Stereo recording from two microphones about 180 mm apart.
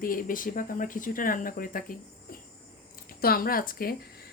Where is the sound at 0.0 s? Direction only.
50° left (ahead or behind).